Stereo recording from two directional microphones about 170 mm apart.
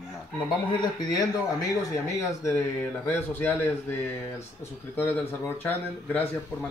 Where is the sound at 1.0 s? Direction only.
25° left (ahead or behind).